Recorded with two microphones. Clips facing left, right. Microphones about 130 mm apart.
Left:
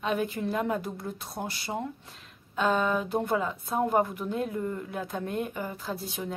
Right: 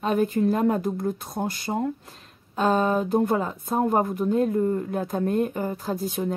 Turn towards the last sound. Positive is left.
turn(degrees=-45)  # may be behind; listen again after turning